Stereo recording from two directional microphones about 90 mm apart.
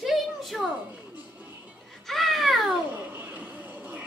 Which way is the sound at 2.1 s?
Centre (ahead or behind).